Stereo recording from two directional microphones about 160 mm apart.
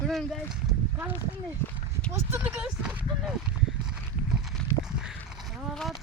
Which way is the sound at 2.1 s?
15° right (ahead or behind).